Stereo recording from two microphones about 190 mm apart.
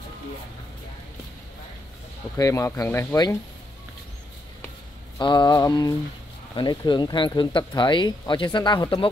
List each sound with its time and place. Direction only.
2.3 s speech: 15° left (ahead or behind)
5.2 s speech: 25° left (ahead or behind)